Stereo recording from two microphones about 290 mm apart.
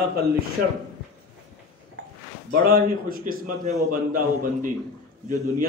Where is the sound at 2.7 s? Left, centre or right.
Right.